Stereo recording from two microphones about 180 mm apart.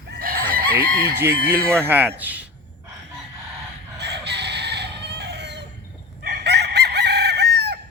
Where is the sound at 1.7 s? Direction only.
10° right (ahead or behind).